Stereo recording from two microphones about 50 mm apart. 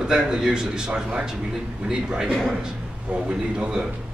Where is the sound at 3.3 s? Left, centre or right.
Centre.